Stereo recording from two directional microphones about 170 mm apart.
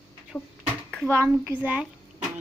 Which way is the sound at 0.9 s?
5° left (ahead or behind).